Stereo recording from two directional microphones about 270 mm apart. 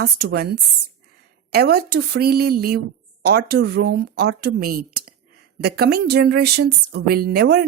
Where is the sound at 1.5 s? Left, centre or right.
Right.